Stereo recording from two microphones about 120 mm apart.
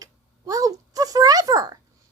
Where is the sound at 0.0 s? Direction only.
30° right (ahead or behind).